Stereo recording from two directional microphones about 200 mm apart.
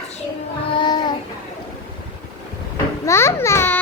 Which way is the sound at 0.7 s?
20° left (ahead or behind).